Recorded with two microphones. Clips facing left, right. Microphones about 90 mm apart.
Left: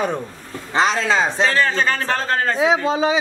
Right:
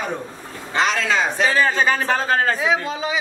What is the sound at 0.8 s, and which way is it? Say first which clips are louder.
Speech: left 2 dB; 30° left (ahead or behind).